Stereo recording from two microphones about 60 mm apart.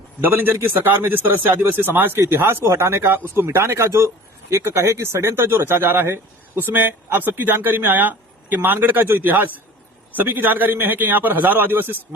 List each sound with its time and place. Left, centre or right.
0.2 s speech: right